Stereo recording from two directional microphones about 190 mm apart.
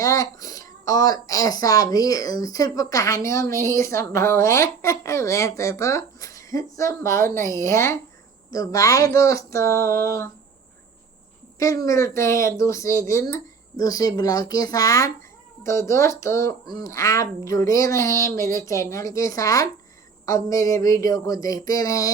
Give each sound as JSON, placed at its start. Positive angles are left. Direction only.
{"t": 0.0, "sound": "speech", "side_deg": 15}
{"t": 11.6, "sound": "speech", "side_deg": 15}